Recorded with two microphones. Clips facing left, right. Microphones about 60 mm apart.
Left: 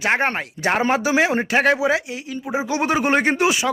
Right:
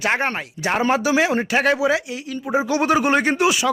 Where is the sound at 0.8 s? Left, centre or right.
Left.